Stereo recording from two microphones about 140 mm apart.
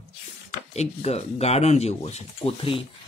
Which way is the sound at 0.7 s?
50° left (ahead or behind).